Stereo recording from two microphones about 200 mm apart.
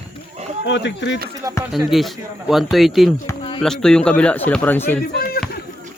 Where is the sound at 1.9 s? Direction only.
Centre (ahead or behind).